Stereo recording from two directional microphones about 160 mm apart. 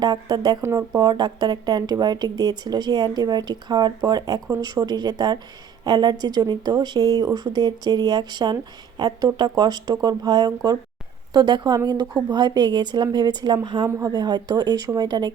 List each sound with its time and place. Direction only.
0.0 s speech: 25° right (ahead or behind)